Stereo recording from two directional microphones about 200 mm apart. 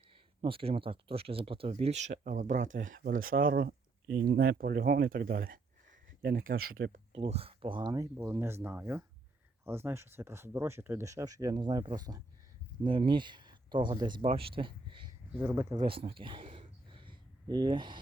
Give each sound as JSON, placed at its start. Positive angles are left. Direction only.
{"t": 0.1, "sound": "speech", "side_deg": -25}
{"t": 6.6, "sound": "speech", "side_deg": -90}
{"t": 7.1, "sound": "speech", "side_deg": -30}
{"t": 15.4, "sound": "speech", "side_deg": -10}